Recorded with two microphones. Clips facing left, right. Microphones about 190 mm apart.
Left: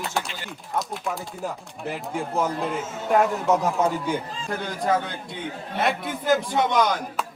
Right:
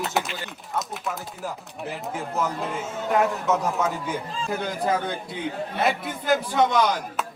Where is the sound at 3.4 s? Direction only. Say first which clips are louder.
Left 2 dB; 35° left (ahead or behind).